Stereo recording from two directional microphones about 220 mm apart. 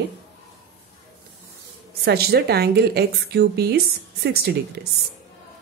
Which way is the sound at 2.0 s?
45° right (ahead or behind).